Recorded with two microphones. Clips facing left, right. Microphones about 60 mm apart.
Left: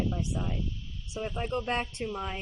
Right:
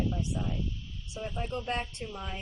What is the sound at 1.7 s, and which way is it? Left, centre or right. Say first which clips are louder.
Speech: left 3 dB; left.